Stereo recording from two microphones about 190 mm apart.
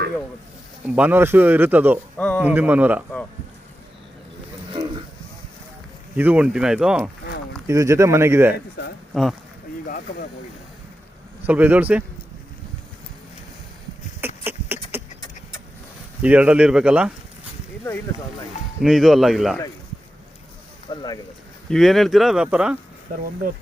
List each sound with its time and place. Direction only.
0.9 s speech: 10° right (ahead or behind)
2.1 s speech: 5° left (ahead or behind)
2.4 s speech: 10° right (ahead or behind)
6.1 s speech: 10° right (ahead or behind)
7.7 s speech: 15° right (ahead or behind)
9.1 s speech: centre (ahead or behind)
11.4 s speech: 10° right (ahead or behind)
14.4 s beatboxing: 10° right (ahead or behind)
16.2 s speech: 10° right (ahead or behind)
18.8 s speech: centre (ahead or behind)
20.9 s speech: 20° left (ahead or behind)
21.7 s speech: centre (ahead or behind)
23.1 s speech: 45° right (ahead or behind)